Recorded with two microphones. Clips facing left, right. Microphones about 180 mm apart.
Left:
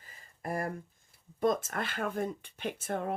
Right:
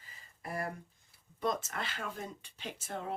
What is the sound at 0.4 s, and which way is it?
Speech, 50° left (ahead or behind).